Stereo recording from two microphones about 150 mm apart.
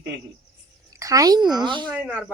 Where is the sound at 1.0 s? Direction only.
20° right (ahead or behind).